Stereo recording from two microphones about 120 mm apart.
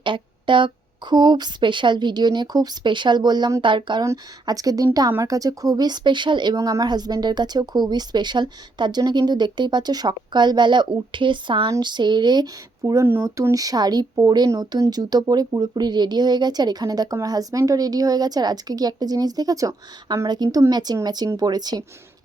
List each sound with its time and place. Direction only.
0.0 s a sound: 45° right (ahead or behind)
1.1 s speech: 35° right (ahead or behind)
4.0 s speech: 30° right (ahead or behind)
6.6 s speech: 25° right (ahead or behind)